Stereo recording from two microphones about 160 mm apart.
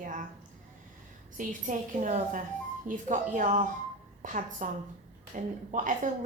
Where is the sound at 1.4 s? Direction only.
55° right (ahead or behind).